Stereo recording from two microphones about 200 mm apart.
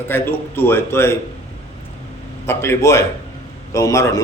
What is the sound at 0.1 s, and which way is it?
A man's voice, 10° left (ahead or behind).